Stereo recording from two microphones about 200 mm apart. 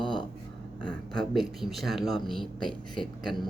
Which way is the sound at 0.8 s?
5° left (ahead or behind).